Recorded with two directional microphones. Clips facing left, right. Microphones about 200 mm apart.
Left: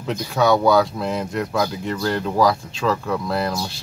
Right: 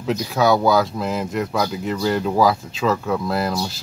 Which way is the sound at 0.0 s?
Centre (ahead or behind).